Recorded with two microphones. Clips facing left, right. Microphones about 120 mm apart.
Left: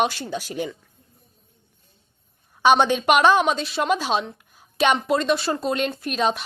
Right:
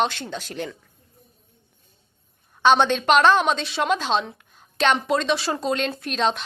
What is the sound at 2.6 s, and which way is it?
Speech, 10° left (ahead or behind).